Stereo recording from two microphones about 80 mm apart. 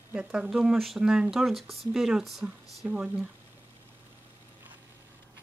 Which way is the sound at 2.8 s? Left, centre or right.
Right.